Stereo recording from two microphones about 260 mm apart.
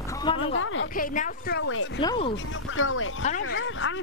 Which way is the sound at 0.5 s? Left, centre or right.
Left.